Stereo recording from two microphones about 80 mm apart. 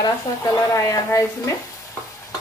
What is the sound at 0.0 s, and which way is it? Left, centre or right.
Speech, left.